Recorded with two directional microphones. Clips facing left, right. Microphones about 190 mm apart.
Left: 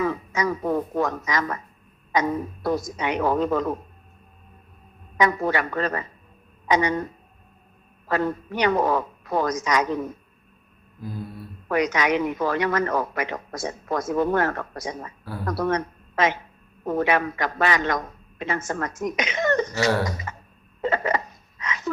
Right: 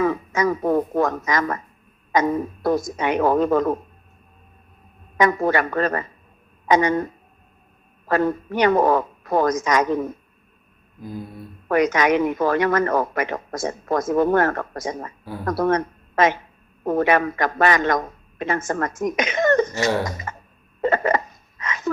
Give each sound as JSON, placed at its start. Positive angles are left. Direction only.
{"t": 0.0, "sound": "speech", "side_deg": -50}
{"t": 5.1, "sound": "speech", "side_deg": -50}
{"t": 8.0, "sound": "speech", "side_deg": -50}
{"t": 11.0, "sound": "a sound", "side_deg": -15}
{"t": 11.7, "sound": "a woman's voice", "side_deg": -50}
{"t": 20.8, "sound": "a sound", "side_deg": -50}